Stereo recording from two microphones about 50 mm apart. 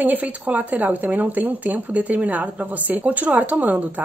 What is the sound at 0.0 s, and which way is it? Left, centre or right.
Speech, right.